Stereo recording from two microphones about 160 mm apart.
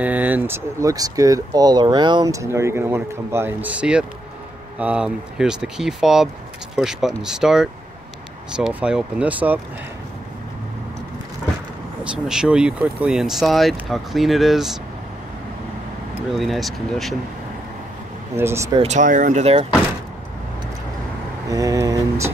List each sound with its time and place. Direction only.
0.0 s speech: 10° right (ahead or behind)
12.0 s speech: 5° right (ahead or behind)
16.3 s speech: centre (ahead or behind)
18.3 s speech: 15° right (ahead or behind)
18.8 s speech: 50° right (ahead or behind)
21.5 s speech: 20° right (ahead or behind)